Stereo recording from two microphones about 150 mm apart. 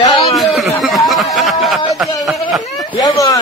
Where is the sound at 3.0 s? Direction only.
20° left (ahead or behind).